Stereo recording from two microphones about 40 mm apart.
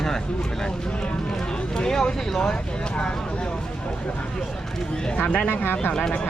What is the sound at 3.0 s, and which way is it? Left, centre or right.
Speech, left.